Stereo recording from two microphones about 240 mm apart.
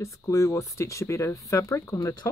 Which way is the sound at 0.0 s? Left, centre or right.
Centre.